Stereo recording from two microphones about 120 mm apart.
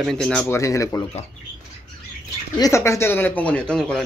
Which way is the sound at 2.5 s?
25° left (ahead or behind).